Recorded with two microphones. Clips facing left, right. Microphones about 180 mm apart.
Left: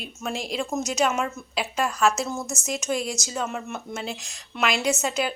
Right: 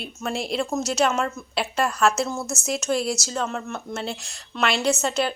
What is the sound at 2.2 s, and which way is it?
A woman's voice, 15° left (ahead or behind).